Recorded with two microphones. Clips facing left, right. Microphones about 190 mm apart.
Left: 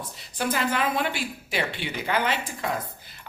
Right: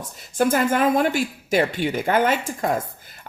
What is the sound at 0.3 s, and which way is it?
Speech, 45° right (ahead or behind).